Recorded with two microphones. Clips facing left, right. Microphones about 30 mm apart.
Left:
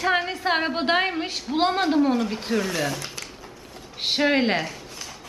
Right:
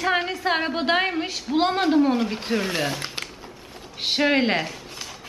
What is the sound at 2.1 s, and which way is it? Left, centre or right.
Speech, centre.